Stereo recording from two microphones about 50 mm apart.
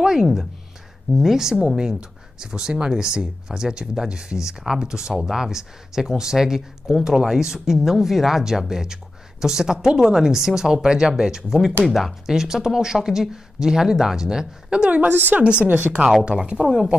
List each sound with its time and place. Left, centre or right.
0.0 s speech: centre
14.9 s a woman's voice: right
15.4 s speech: right
16.5 s speech: centre